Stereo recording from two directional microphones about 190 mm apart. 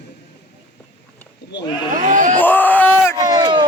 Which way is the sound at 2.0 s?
40° right (ahead or behind).